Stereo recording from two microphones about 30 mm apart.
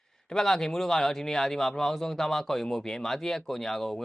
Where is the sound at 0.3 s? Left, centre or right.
Centre.